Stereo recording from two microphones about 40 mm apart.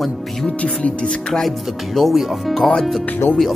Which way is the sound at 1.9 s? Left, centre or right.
Centre.